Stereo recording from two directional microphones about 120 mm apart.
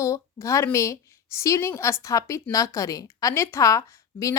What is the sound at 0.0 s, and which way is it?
A woman's voice, 25° left (ahead or behind).